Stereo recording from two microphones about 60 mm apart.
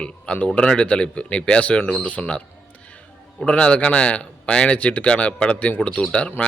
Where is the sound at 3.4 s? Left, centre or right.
Centre.